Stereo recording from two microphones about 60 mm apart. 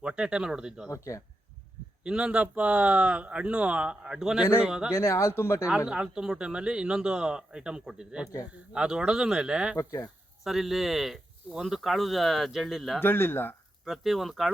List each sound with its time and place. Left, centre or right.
0.0 s a man's voice: centre
0.9 s speech: left
2.0 s a man's voice: centre
4.9 s speech: left
5.6 s a man's voice: centre
9.7 s speech: left
10.4 s speech: centre
13.0 s speech: left
13.8 s speech: centre